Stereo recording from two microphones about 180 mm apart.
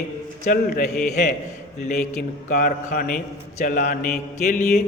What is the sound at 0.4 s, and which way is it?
A man's voice, 50° left (ahead or behind).